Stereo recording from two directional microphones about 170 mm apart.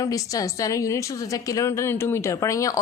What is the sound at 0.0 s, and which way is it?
A woman's voice, 20° left (ahead or behind).